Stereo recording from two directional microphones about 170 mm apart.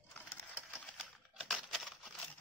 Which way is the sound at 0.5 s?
5° right (ahead or behind).